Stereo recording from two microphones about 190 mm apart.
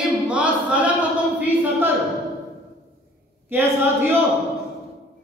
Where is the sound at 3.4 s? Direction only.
10° right (ahead or behind).